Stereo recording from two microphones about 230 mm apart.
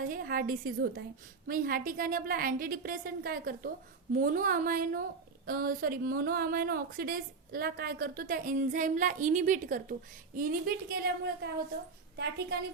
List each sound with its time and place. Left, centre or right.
0.1 s a woman's voice: right